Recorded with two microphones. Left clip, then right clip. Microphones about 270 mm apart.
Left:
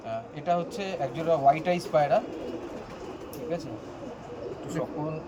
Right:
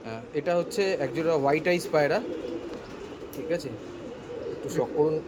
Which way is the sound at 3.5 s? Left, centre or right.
Centre.